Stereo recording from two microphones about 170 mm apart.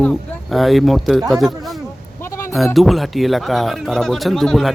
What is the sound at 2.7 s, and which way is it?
Speech, centre (ahead or behind).